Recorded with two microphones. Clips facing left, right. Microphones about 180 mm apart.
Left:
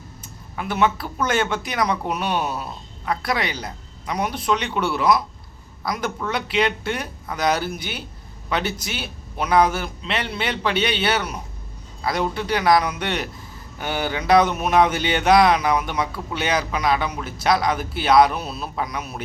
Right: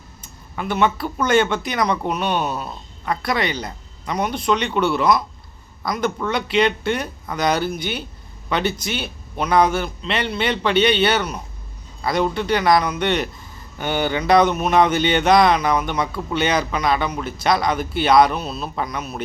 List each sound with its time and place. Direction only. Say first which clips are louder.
0.2 s speech: right 3 dB; 5° left (ahead or behind)